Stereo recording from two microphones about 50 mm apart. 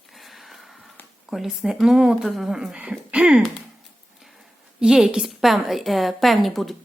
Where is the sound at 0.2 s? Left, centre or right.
Centre.